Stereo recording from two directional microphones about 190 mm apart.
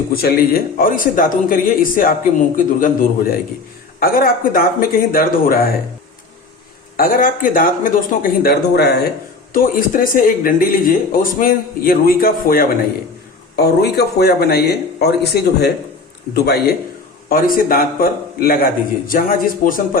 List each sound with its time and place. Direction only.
0.1 s speech: 50° left (ahead or behind)
6.9 s speech: 45° left (ahead or behind)
9.5 s speech: 45° left (ahead or behind)
17.2 s speech: 50° left (ahead or behind)